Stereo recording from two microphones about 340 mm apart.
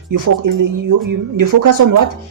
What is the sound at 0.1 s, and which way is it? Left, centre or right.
Speech, right.